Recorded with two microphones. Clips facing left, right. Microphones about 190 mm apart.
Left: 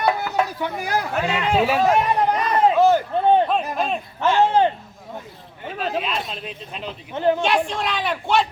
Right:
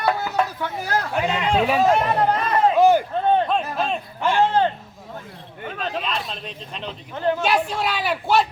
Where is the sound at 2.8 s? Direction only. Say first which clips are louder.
Right 2 dB; 15° right (ahead or behind).